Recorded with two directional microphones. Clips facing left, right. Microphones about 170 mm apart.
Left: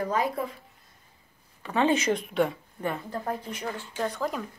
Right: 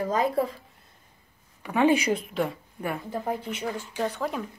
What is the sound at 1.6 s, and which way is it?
Speech, 10° right (ahead or behind).